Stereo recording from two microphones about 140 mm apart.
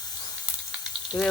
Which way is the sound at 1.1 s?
10° left (ahead or behind).